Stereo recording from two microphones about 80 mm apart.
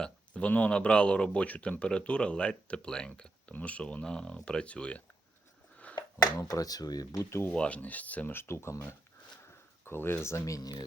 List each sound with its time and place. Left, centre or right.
0.0 s speech: centre
5.8 s a sound: centre
6.4 s speech: left
7.3 s speech: left
7.5 s speech: centre; by 8.8 s left
9.8 s speech: left